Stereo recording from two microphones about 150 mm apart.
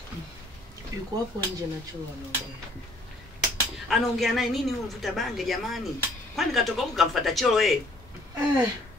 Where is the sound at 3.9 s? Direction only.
Centre (ahead or behind).